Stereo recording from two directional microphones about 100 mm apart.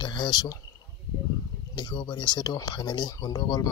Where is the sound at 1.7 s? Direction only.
45° left (ahead or behind).